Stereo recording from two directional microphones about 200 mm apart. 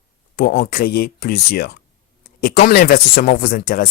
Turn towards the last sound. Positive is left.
turn(degrees=45)  # may be behind; listen again after turning